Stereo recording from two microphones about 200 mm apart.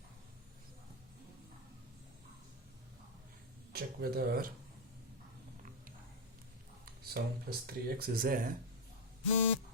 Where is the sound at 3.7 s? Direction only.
50° right (ahead or behind).